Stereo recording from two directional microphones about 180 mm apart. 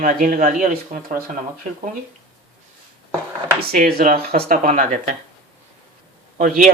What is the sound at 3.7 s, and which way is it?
Speech, 55° right (ahead or behind).